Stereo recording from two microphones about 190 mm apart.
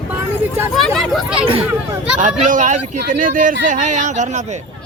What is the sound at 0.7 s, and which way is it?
Speech, centre (ahead or behind).